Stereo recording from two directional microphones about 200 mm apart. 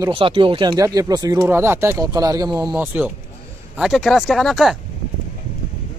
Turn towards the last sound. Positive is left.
turn(degrees=0)  # may be behind; listen again after turning